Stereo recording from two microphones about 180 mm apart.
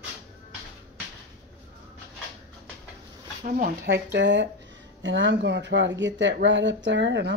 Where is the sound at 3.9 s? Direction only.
75° right (ahead or behind).